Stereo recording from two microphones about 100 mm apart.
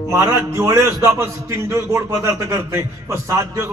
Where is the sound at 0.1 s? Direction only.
30° right (ahead or behind).